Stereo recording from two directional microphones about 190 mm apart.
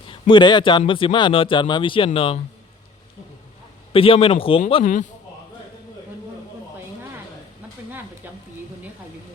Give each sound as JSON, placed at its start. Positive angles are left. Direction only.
{"t": 0.1, "sound": "a man's voice", "side_deg": 25}
{"t": 3.9, "sound": "a man's voice", "side_deg": 30}
{"t": 4.8, "sound": "a man's voice", "side_deg": 40}